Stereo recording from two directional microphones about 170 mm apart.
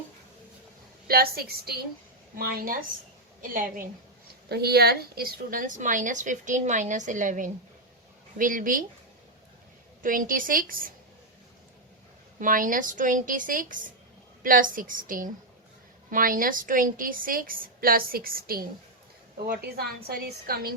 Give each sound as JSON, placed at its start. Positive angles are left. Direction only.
{"t": 1.0, "sound": "a woman's voice", "side_deg": -60}
{"t": 4.4, "sound": "a woman's voice", "side_deg": -70}
{"t": 10.0, "sound": "a woman's voice", "side_deg": -55}
{"t": 12.4, "sound": "a woman's voice", "side_deg": -55}
{"t": 20.1, "sound": "a woman's voice", "side_deg": -65}